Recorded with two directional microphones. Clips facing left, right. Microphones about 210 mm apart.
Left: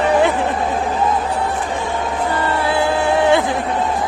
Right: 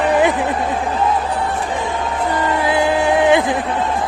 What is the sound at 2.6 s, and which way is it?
Music, 15° right (ahead or behind).